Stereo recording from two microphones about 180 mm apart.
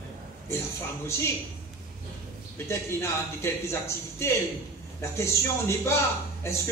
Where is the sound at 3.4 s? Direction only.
15° left (ahead or behind).